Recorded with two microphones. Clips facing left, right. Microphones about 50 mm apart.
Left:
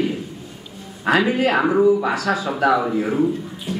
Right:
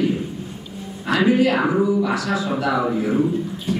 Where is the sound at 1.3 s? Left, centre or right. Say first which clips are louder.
Right 1 dB; left.